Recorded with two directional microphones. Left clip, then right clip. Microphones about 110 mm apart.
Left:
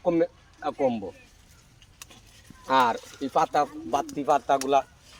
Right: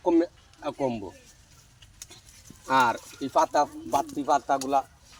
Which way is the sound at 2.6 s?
50° left (ahead or behind).